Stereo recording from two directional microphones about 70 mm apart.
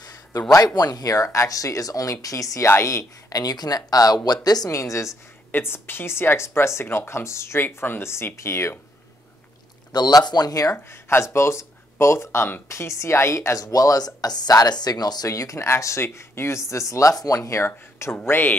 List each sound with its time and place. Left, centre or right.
0.7 s speech: left
2.7 s speech: left
3.3 s speech: left
4.6 s speech: left
5.5 s speech: left
9.9 s speech: left
10.9 s speech: left
13.6 s speech: left
15.2 s a woman's voice: left